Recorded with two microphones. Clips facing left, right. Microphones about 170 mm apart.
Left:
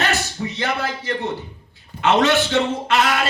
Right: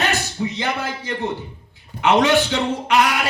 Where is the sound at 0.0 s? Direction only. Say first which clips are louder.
Right 1 dB; 15° right (ahead or behind).